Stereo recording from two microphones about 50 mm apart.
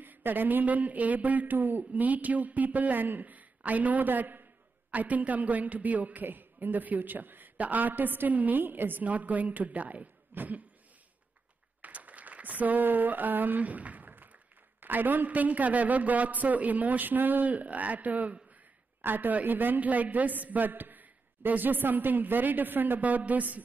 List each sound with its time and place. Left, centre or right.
0.0 s a man's voice: right
9.0 s a man's voice: right
11.8 s a sound: right
14.8 s a man's voice: right